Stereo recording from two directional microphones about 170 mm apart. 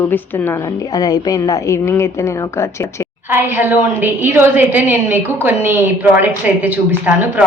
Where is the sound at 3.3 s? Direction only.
15° right (ahead or behind).